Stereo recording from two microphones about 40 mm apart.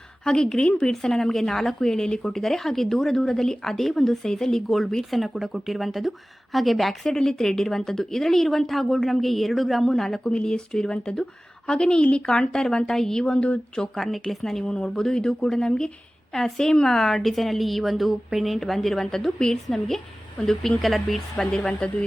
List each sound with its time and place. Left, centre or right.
0.3 s a woman's voice: centre
7.0 s a woman's voice: centre
10.2 s a woman's voice: left
13.3 s a woman's voice: left
13.9 s speech: centre
14.6 s a woman's voice: left; by 21.2 s centre
21.3 s a woman's voice: centre